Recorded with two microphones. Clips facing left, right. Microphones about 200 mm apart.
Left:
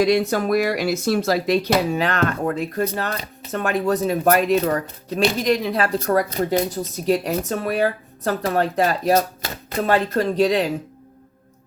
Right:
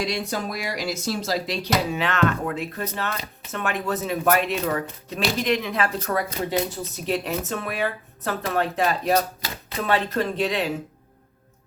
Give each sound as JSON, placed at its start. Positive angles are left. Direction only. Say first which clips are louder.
{"t": 0.0, "sound": "speech", "louder": "left 9 dB", "side_deg": 55}
{"t": 2.0, "sound": "speech", "louder": "left 2 dB", "side_deg": 40}